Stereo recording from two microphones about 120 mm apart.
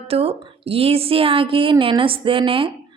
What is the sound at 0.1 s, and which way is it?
A woman's voice, 55° right (ahead or behind).